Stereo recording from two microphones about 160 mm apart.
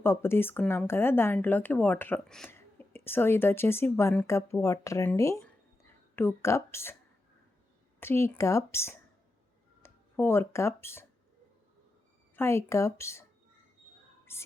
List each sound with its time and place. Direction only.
0.0 s speech: 15° left (ahead or behind)
2.5 s speech: 15° left (ahead or behind)
8.0 s speech: 15° left (ahead or behind)
12.4 s speech: 15° left (ahead or behind)
14.3 s music: 15° left (ahead or behind)